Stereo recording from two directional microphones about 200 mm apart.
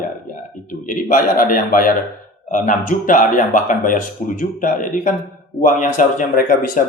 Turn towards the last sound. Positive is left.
turn(degrees=45)  # may be behind; listen again after turning